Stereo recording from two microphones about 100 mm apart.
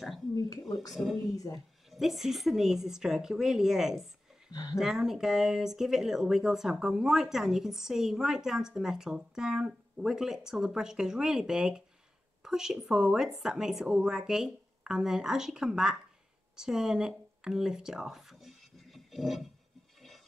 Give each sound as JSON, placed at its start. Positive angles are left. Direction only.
{"t": 0.3, "sound": "speech", "side_deg": 35}
{"t": 1.9, "sound": "speech", "side_deg": 0}
{"t": 4.5, "sound": "speech", "side_deg": 40}
{"t": 4.7, "sound": "speech", "side_deg": -5}
{"t": 17.4, "sound": "music", "side_deg": -5}